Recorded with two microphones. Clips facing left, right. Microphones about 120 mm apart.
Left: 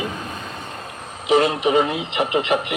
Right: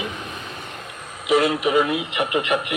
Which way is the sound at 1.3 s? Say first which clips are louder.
Left 2 dB; 25° left (ahead or behind).